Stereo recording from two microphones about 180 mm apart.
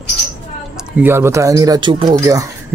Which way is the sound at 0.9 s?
10° right (ahead or behind).